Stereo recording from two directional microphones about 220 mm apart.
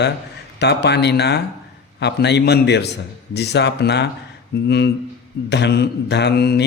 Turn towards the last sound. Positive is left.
turn(degrees=50)  # may be behind; listen again after turning